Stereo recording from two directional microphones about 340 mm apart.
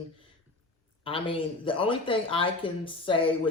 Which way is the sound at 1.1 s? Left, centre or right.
Centre.